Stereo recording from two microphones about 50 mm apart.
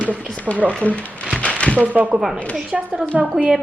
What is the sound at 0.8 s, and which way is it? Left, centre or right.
Speech, left.